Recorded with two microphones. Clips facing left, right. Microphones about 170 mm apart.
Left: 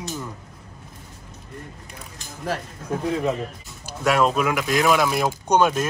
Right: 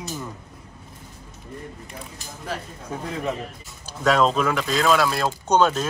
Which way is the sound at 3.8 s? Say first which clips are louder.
Even; 10° left (ahead or behind).